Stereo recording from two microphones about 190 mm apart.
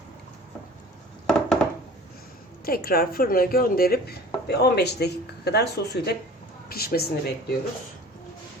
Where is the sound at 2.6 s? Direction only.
50° left (ahead or behind).